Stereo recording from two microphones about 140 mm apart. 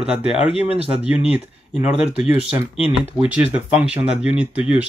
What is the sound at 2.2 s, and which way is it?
Speech, 10° right (ahead or behind).